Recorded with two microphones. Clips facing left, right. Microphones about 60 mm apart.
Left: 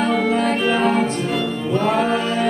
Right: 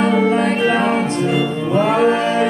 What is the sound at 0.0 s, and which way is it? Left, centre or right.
Music, centre.